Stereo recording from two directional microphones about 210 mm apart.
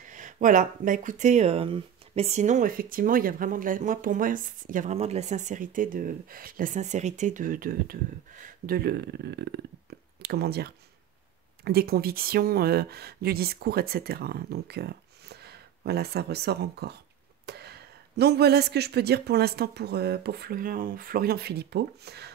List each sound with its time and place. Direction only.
0.1 s speech: 35° right (ahead or behind)